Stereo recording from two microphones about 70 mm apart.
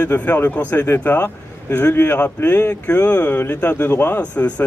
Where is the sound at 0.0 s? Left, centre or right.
Left.